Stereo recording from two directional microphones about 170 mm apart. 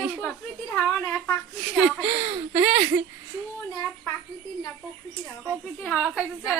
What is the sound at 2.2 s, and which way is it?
Speech, 30° right (ahead or behind).